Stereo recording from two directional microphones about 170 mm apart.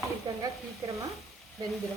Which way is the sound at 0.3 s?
20° right (ahead or behind).